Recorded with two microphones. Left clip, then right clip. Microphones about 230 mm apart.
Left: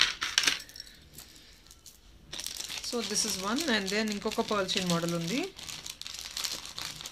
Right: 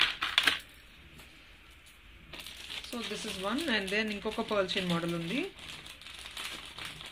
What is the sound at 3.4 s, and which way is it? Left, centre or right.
Speech, left.